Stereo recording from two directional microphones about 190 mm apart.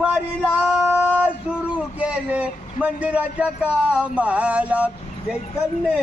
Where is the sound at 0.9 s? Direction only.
10° right (ahead or behind).